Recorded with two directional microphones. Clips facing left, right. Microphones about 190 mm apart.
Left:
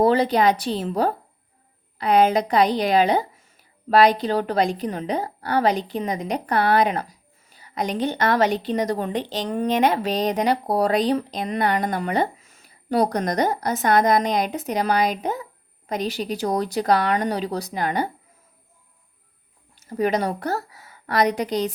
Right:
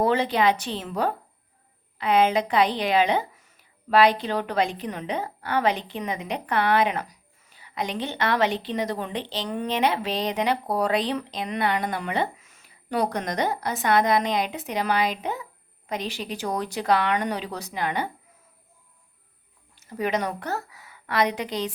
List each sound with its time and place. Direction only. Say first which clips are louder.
0.0 s a woman's voice: left 4 dB; 35° left (ahead or behind)
19.7 s a woman's voice: left 4 dB; 40° left (ahead or behind)